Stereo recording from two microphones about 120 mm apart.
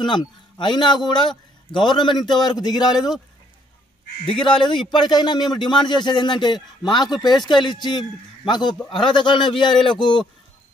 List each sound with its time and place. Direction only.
0.0 s speech: 40° left (ahead or behind)
4.3 s speech: 45° left (ahead or behind)